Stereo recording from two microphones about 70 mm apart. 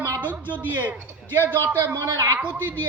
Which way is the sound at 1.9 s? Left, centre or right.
Right.